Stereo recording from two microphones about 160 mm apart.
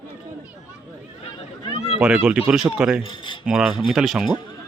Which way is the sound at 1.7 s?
40° left (ahead or behind).